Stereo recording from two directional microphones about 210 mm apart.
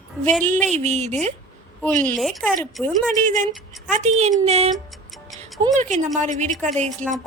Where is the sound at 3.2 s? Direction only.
35° right (ahead or behind).